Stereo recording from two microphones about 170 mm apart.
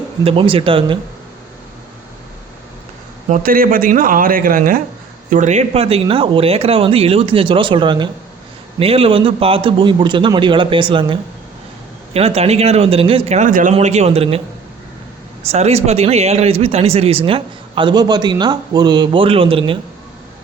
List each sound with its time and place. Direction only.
0.3 s speech: 30° right (ahead or behind)
3.2 s a man's voice: 50° right (ahead or behind)
13.7 s speech: 40° right (ahead or behind)
15.4 s speech: 40° right (ahead or behind)